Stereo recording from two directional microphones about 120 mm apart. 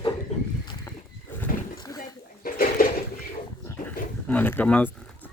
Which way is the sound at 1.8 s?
30° left (ahead or behind).